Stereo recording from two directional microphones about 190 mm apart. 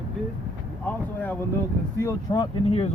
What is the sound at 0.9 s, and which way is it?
Speech, 10° left (ahead or behind).